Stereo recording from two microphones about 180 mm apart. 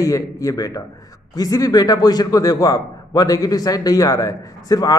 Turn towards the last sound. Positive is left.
turn(degrees=20)  # may be behind; listen again after turning